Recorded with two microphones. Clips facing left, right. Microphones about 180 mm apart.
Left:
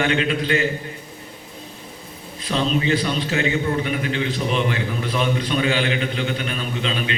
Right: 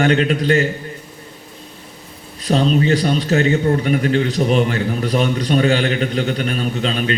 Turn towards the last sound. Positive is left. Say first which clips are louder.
# right 5 dB
turn(degrees=-45)  # may be behind; listen again after turning